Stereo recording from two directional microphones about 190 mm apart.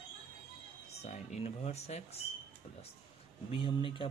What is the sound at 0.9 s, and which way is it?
Speech, 35° left (ahead or behind).